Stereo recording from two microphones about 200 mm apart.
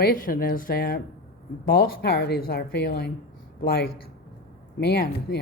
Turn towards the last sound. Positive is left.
turn(degrees=50)  # may be behind; listen again after turning